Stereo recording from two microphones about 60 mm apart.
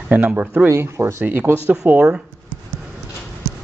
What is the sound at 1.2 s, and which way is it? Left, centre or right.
Speech, right.